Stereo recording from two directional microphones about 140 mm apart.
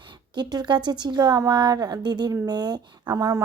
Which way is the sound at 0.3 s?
30° right (ahead or behind).